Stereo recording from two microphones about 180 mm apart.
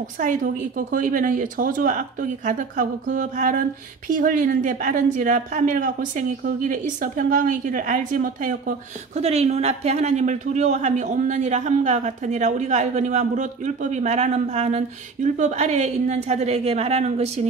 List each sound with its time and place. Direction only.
0.2 s a woman's voice: 45° right (ahead or behind)